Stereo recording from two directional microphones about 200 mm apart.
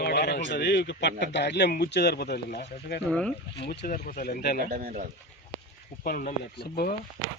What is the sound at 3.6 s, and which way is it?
Speech, 45° left (ahead or behind).